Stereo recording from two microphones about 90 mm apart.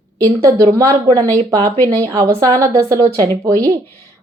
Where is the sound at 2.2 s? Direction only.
45° right (ahead or behind).